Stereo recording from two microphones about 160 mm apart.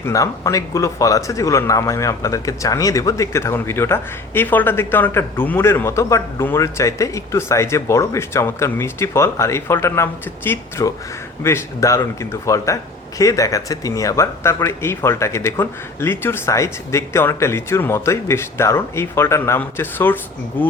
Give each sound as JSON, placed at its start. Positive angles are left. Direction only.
{"t": 0.0, "sound": "speech", "side_deg": 20}